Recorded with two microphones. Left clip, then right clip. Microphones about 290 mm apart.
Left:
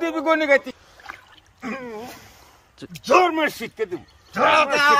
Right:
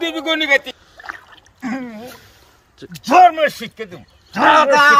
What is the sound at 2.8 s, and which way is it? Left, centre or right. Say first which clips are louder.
Speech: right 3 dB; centre.